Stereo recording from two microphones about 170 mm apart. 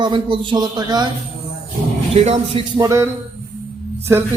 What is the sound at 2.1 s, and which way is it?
Speech, 35° right (ahead or behind).